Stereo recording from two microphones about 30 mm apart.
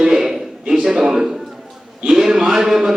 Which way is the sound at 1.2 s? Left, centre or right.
Centre.